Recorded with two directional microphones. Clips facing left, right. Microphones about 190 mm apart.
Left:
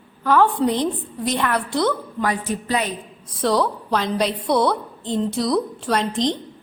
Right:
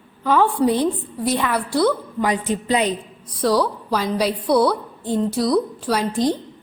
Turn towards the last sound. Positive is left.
turn(degrees=-5)  # may be behind; listen again after turning